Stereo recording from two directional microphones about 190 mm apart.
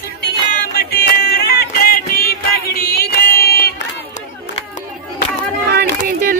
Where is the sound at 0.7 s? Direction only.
55° left (ahead or behind).